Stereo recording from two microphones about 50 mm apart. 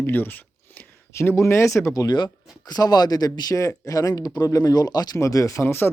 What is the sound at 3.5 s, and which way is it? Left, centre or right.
Speech, left.